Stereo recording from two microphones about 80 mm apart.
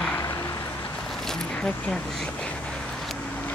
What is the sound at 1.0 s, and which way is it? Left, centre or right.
Boat, centre.